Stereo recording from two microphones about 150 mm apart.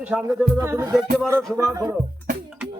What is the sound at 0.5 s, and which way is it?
Music, 15° right (ahead or behind).